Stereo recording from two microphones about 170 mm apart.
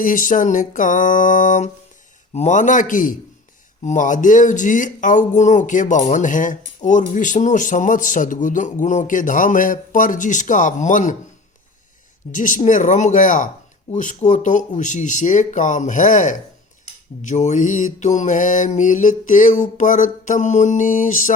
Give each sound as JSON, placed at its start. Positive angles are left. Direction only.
{"t": 0.0, "sound": "a man's voice", "side_deg": 50}
{"t": 12.3, "sound": "a man's voice", "side_deg": 50}